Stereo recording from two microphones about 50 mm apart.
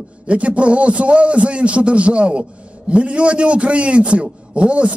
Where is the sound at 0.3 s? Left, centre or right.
Right.